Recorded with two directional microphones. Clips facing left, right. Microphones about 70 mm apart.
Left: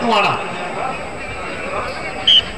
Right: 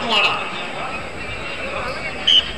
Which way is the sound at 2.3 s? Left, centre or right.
Centre.